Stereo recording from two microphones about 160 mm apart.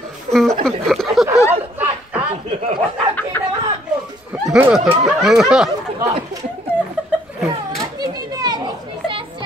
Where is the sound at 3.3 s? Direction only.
10° left (ahead or behind).